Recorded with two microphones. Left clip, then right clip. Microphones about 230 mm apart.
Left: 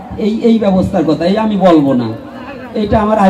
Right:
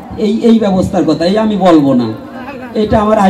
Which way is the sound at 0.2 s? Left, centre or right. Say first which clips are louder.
Right 2 dB; right.